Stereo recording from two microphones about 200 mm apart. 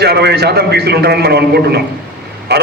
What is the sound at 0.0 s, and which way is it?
A man's voice, 55° right (ahead or behind).